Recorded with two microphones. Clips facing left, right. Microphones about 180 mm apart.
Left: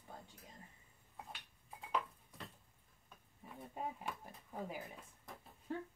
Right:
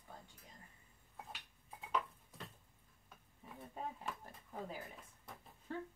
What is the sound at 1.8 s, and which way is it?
Dishes, centre (ahead or behind).